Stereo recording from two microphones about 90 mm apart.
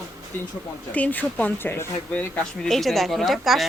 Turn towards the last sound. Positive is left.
turn(degrees=0)  # may be behind; listen again after turning